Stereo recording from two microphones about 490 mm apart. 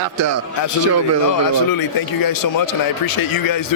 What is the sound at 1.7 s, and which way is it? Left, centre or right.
A man's voice, left.